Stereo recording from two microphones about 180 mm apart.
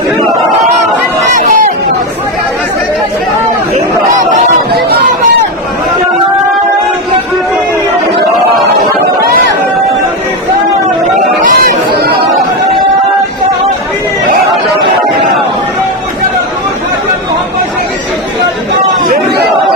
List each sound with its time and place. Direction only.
1.3 s chatter: 45° right (ahead or behind)
11.3 s chatter: 45° right (ahead or behind)